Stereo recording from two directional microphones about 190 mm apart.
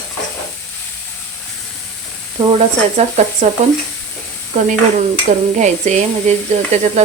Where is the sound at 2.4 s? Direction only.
20° right (ahead or behind).